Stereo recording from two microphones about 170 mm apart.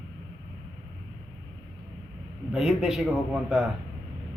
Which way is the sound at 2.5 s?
Centre (ahead or behind).